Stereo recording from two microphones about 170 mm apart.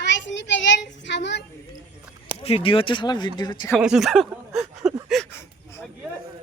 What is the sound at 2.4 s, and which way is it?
Speech, 35° left (ahead or behind).